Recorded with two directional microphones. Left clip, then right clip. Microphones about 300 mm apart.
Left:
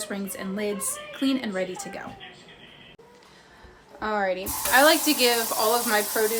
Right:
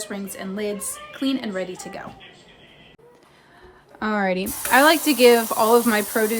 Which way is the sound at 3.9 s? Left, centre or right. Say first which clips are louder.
Right 3 dB; right.